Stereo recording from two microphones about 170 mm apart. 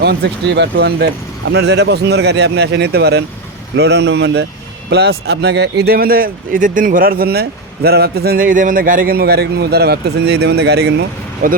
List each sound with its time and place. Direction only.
0.0 s speech: 70° right (ahead or behind); by 4.4 s 85° right
4.9 s speech: 75° right (ahead or behind)
11.4 s speech: 55° right (ahead or behind)